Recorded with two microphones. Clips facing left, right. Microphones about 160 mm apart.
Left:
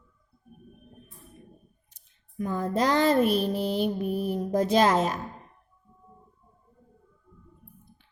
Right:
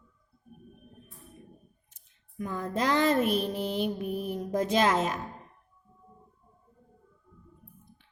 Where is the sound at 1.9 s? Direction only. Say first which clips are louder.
Left 4 dB; 35° left (ahead or behind).